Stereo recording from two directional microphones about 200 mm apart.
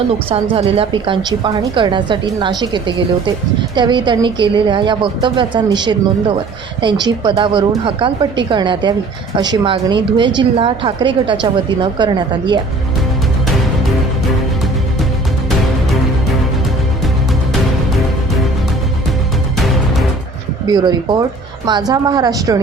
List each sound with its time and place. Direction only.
0.3 s speech: 30° right (ahead or behind)
20.7 s speech: 20° right (ahead or behind)